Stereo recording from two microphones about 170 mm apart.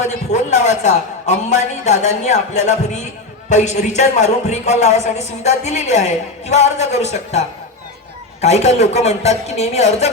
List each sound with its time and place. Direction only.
0.0 s a man's voice: 45° left (ahead or behind)